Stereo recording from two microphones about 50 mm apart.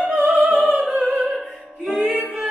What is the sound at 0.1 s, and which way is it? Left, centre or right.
Opera, right.